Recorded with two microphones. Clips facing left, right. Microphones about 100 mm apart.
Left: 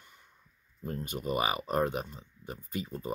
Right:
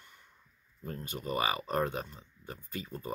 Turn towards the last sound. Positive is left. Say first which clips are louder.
# left 4 dB
turn(degrees=15)  # may be behind; listen again after turning